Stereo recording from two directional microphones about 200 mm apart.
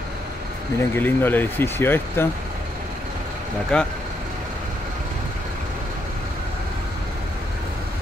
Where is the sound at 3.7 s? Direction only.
5° left (ahead or behind).